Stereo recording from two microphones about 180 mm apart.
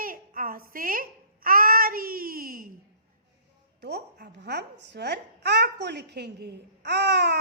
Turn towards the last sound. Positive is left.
turn(degrees=-65)  # may be behind; listen again after turning